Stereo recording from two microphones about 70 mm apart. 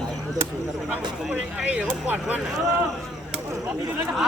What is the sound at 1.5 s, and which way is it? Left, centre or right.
Speech, right.